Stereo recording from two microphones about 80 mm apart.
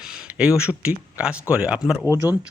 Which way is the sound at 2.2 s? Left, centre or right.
Left.